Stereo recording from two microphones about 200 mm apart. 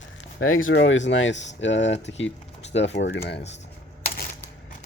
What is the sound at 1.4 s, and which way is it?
Speech, 35° left (ahead or behind).